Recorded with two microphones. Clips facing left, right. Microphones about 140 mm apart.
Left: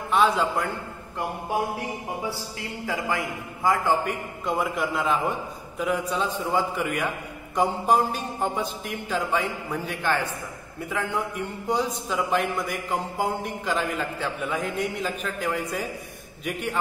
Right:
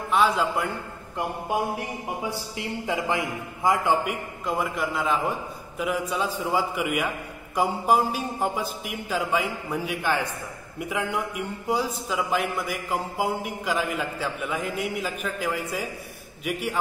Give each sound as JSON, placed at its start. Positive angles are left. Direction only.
{"t": 0.1, "sound": "a man's voice", "side_deg": 0}
{"t": 2.2, "sound": "a man's voice", "side_deg": -20}
{"t": 4.5, "sound": "a man's voice", "side_deg": 0}